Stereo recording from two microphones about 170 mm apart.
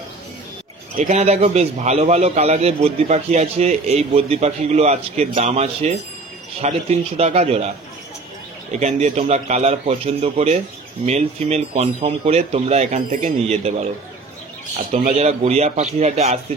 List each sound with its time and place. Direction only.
0.9 s a man's voice: 45° right (ahead or behind)
8.7 s a man's voice: 40° right (ahead or behind)
15.1 s a man's voice: 40° right (ahead or behind)